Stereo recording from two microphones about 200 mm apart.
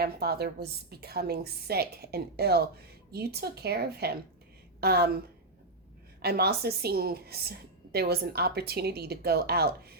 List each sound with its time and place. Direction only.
0.0 s a woman's voice: 50° right (ahead or behind)
6.2 s a woman's voice: 50° right (ahead or behind)